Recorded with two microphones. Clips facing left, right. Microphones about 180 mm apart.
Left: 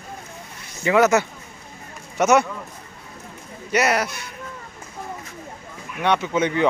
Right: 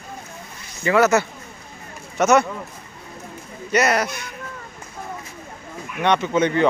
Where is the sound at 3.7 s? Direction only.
10° left (ahead or behind).